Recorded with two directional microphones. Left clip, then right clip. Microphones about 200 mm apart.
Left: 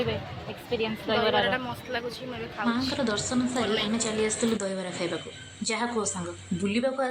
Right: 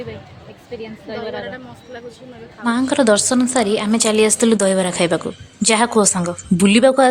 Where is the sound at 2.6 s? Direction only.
40° right (ahead or behind).